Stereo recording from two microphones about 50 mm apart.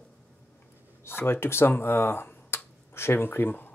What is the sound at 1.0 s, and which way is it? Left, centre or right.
Speech, left.